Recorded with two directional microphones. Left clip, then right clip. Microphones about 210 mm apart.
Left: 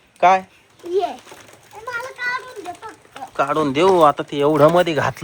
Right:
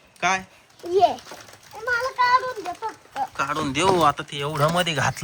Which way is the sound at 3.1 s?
5° right (ahead or behind).